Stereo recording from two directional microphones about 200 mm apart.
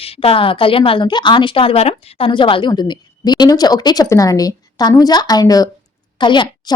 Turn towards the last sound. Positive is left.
turn(degrees=25)  # may be behind; listen again after turning